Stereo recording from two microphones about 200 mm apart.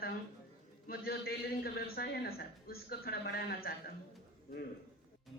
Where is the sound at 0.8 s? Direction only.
50° left (ahead or behind).